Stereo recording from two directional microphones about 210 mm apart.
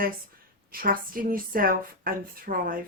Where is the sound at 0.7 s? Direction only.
45° right (ahead or behind).